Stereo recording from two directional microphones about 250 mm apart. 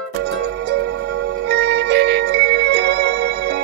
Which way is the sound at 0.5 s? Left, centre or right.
Right.